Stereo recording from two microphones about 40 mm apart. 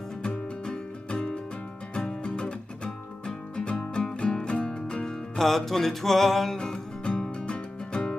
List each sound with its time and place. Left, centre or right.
0.7 s music: left
5.0 s music: centre
6.6 s music: centre